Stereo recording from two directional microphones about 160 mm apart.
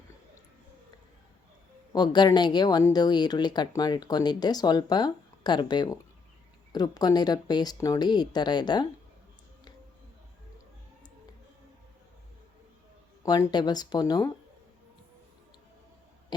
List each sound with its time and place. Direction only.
1.9 s speech: 25° left (ahead or behind)
13.2 s speech: 25° left (ahead or behind)